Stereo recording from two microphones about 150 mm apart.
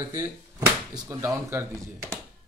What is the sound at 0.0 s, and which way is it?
Speech, 25° right (ahead or behind).